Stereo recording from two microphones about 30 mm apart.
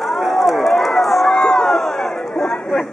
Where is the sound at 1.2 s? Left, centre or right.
Centre.